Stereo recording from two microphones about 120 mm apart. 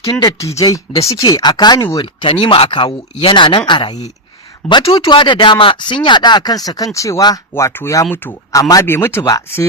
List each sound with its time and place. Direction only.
0.2 s speech: 30° left (ahead or behind)
2.2 s speech: 45° left (ahead or behind)
4.6 s speech: 5° left (ahead or behind)
4.9 s speech: 40° left (ahead or behind)
7.5 s speech: 20° left (ahead or behind)